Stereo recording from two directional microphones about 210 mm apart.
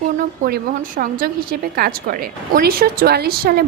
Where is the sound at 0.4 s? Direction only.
45° right (ahead or behind).